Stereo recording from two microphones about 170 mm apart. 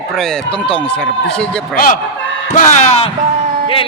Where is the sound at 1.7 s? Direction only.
55° left (ahead or behind).